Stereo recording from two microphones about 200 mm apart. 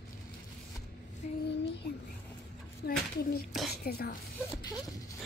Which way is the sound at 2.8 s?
50° left (ahead or behind).